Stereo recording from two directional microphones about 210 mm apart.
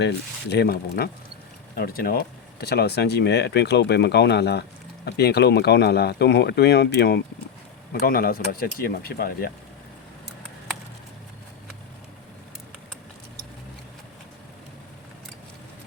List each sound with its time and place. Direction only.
0.5 s speech: 50° left (ahead or behind)